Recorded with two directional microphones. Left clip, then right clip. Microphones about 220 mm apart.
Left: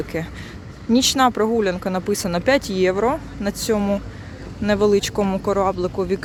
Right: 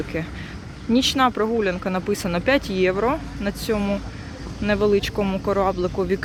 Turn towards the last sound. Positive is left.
turn(degrees=5)  # may be behind; listen again after turning